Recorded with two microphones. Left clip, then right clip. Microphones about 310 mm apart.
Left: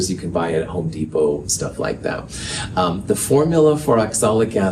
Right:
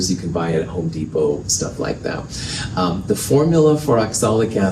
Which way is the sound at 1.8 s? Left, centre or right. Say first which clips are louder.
Left 1 dB; left.